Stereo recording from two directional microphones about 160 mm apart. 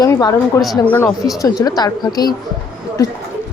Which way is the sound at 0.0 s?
25° left (ahead or behind).